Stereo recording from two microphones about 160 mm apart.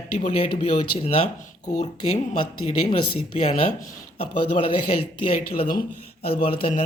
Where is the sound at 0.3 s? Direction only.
35° left (ahead or behind).